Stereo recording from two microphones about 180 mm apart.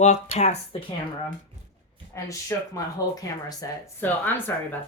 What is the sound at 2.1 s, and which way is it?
Speech, 15° left (ahead or behind).